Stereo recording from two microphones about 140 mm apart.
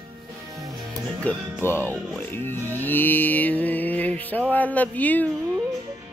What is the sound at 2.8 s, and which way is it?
Mantra, 15° left (ahead or behind).